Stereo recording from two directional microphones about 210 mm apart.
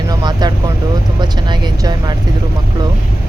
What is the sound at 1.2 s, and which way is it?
Speech, 20° right (ahead or behind).